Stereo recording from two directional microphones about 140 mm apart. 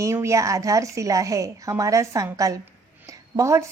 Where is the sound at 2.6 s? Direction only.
20° right (ahead or behind).